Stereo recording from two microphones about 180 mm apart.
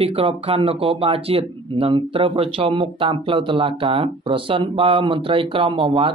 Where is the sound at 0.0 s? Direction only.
30° right (ahead or behind).